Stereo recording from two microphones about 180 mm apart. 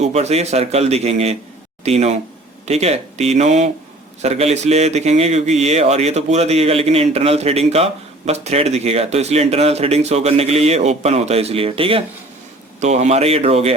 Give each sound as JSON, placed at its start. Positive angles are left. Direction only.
{"t": 0.0, "sound": "a man's voice", "side_deg": -35}